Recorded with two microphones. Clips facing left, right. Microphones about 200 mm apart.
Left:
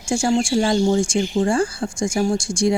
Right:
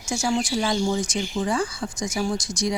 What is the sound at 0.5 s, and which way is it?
Speech, 50° left (ahead or behind).